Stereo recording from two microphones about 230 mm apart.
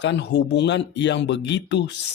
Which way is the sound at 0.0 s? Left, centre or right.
Left.